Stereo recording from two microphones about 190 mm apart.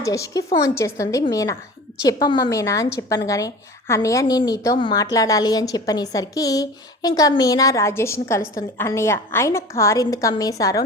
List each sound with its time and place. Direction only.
0.0 s a woman's voice: 15° left (ahead or behind)